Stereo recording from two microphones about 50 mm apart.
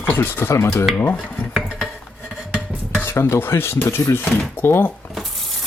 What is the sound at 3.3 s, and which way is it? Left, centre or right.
Speech, left.